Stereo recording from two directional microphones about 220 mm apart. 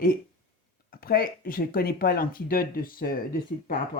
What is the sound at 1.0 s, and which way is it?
Speech, 40° left (ahead or behind).